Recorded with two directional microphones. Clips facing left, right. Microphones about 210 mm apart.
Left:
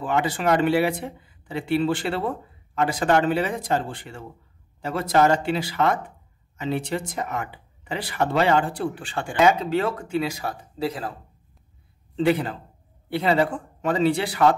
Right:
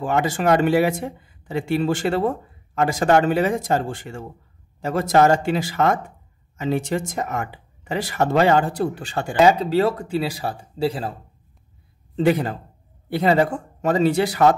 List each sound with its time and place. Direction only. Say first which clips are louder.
0.0 s speech: right 3 dB; 45° right (ahead or behind); by 11.1 s 30° right (ahead or behind)
12.2 s speech: right 2 dB; 45° right (ahead or behind)